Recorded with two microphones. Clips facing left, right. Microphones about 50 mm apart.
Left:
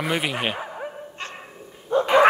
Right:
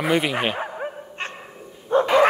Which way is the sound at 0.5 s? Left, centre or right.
Right.